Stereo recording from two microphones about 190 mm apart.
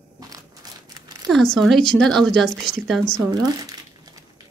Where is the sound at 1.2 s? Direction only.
Centre (ahead or behind).